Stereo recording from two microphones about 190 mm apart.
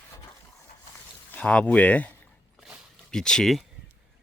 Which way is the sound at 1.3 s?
5° left (ahead or behind).